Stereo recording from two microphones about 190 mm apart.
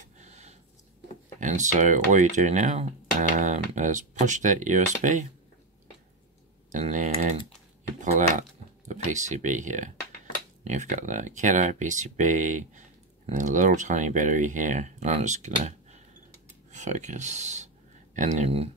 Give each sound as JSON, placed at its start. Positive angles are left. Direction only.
{"t": 0.0, "sound": "a sound", "side_deg": -40}
{"t": 1.4, "sound": "speech", "side_deg": -40}
{"t": 6.7, "sound": "speech", "side_deg": -40}
{"t": 16.7, "sound": "speech", "side_deg": -40}